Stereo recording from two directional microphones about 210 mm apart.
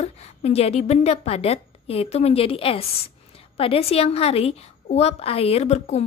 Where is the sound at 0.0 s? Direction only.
30° left (ahead or behind).